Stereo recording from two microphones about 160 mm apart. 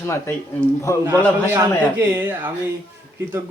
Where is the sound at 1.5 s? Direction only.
15° right (ahead or behind).